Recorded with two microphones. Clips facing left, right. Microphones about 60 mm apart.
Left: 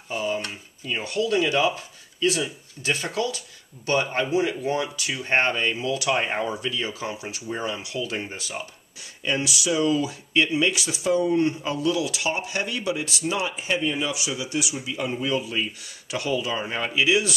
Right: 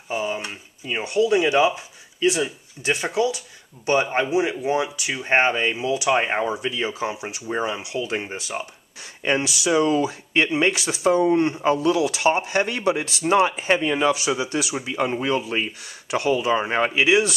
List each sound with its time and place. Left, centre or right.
0.1 s speech: centre
9.2 s speech: right